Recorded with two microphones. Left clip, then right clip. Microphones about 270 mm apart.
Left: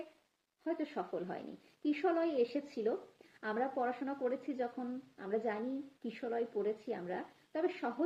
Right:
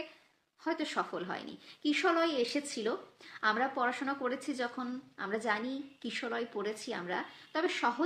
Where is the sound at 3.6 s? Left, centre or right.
Centre.